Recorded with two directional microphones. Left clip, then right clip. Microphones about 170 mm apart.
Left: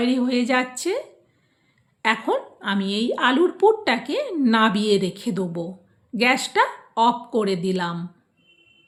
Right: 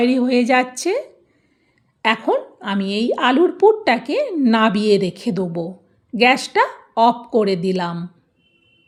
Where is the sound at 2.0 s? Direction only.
30° right (ahead or behind).